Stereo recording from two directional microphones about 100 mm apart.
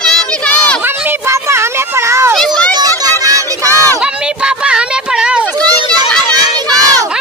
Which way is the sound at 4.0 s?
10° right (ahead or behind).